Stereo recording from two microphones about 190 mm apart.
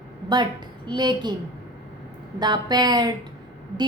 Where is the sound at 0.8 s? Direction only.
20° right (ahead or behind).